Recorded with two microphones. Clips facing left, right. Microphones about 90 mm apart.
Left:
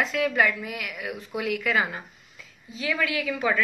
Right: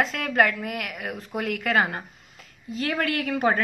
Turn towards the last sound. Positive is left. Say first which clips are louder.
# right 3 dB
turn(degrees=-55)  # may be behind; listen again after turning